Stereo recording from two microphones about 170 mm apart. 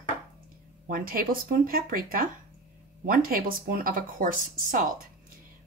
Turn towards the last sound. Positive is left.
turn(degrees=-50)  # may be behind; listen again after turning